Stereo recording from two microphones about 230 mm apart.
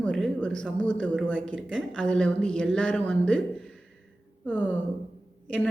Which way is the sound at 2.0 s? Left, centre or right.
Centre.